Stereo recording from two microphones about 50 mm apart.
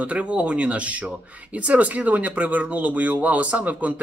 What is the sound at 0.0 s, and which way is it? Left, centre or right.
Speech, right.